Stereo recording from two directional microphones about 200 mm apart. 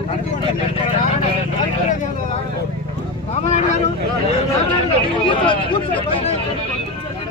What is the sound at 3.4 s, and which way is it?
Vehicle, 35° left (ahead or behind).